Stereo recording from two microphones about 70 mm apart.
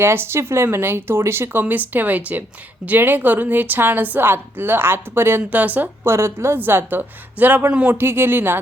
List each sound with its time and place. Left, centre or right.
0.0 s a woman's voice: right
5.4 s a woman's voice: right
6.1 s speech: right; by 7.9 s centre
7.9 s speech: right